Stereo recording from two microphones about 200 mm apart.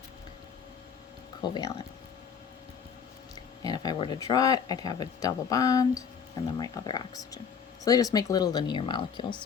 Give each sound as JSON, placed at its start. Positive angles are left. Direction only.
{"t": 1.4, "sound": "speech", "side_deg": 20}
{"t": 3.6, "sound": "speech", "side_deg": 20}